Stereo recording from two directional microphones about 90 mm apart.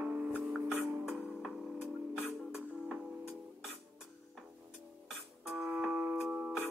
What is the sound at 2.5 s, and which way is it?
Music, 10° right (ahead or behind).